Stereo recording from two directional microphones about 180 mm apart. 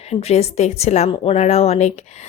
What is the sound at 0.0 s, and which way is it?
A woman's voice, 35° left (ahead or behind).